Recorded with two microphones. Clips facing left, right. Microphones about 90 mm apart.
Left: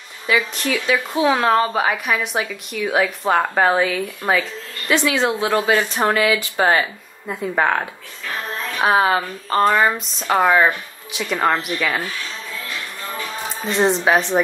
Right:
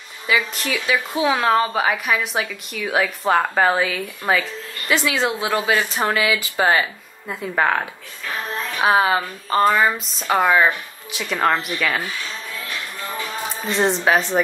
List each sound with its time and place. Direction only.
0.6 s a woman's voice: centre (ahead or behind)
10.4 s speech: 15° left (ahead or behind)
11.1 s a woman's voice: centre (ahead or behind)
12.0 s a sound: 15° right (ahead or behind)
13.7 s a woman's voice: centre (ahead or behind)